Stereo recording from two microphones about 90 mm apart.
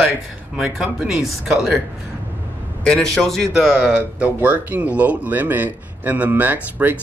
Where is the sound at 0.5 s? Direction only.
5° right (ahead or behind).